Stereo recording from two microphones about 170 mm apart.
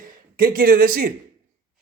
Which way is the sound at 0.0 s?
55° right (ahead or behind).